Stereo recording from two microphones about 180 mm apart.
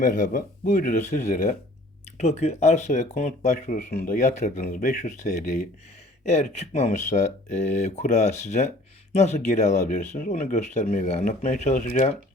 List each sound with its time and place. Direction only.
0.0 s speech: 50° left (ahead or behind)